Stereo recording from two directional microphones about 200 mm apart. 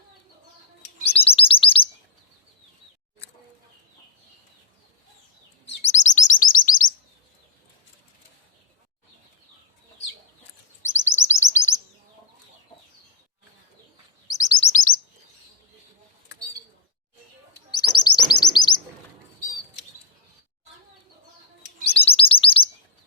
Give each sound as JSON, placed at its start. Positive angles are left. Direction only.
{"t": 1.0, "sound": "chirp", "side_deg": 30}
{"t": 5.8, "sound": "chirp", "side_deg": 35}
{"t": 10.8, "sound": "chirp", "side_deg": 15}
{"t": 14.3, "sound": "chirp", "side_deg": 20}
{"t": 17.7, "sound": "chirp", "side_deg": 20}
{"t": 21.8, "sound": "chirp", "side_deg": 30}